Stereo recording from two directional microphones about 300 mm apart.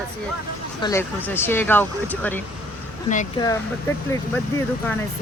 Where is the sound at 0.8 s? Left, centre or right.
Centre.